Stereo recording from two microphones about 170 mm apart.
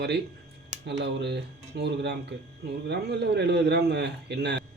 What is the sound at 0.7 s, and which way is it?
Speech, 90° right.